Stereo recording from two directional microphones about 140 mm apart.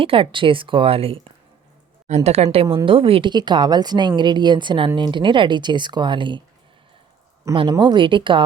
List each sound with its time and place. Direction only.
0.0 s a woman's voice: 40° right (ahead or behind)
7.5 s a woman's voice: 35° right (ahead or behind)